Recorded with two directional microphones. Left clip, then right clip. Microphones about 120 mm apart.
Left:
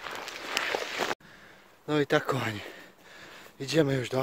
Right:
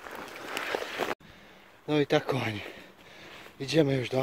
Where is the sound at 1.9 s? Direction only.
Centre (ahead or behind).